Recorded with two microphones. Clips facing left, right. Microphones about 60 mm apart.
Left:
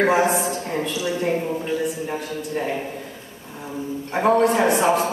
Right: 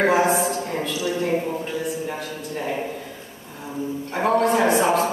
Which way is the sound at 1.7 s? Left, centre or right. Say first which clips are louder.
Left 2 dB; centre.